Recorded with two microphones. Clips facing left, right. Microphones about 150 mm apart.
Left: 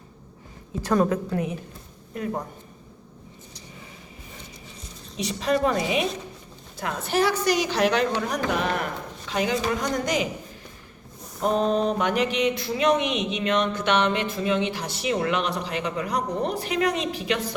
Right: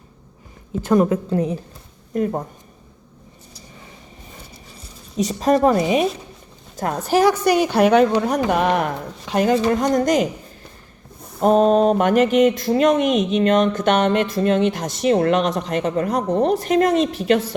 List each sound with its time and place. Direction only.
0.8 s a woman's voice: 20° right (ahead or behind)
2.1 s mantra: 45° right (ahead or behind)
5.1 s mantra: 40° right (ahead or behind)
6.7 s speech: 40° right (ahead or behind)
7.4 s a woman's voice: 55° right (ahead or behind)
9.7 s mantra: 45° right (ahead or behind)
11.4 s mantra: 45° right (ahead or behind)
15.0 s speech: 40° right (ahead or behind)